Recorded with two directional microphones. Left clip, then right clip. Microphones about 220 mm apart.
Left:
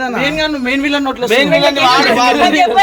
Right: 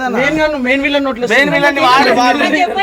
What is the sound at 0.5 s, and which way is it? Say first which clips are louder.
A man's voice: right 2 dB; 20° left (ahead or behind).